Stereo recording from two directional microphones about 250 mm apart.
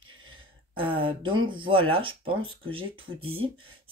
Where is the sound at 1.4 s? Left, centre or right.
Centre.